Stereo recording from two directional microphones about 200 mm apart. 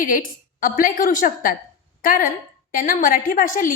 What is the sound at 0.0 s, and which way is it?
A woman's voice, 45° left (ahead or behind).